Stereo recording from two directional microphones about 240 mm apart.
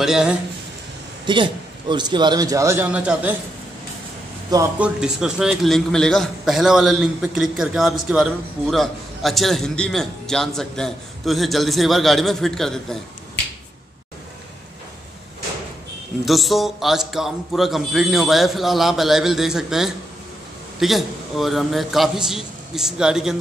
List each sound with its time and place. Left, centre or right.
0.0 s a man's voice: centre
1.2 s a man's voice: centre
4.5 s a man's voice: centre
16.3 s a man's voice: centre